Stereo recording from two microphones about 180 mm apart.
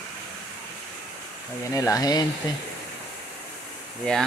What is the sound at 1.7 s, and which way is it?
Speech, 20° left (ahead or behind).